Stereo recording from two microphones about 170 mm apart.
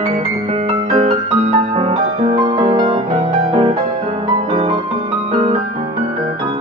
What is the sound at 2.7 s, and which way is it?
Music, 25° right (ahead or behind).